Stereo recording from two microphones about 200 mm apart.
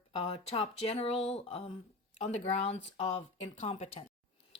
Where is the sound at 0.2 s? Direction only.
25° left (ahead or behind).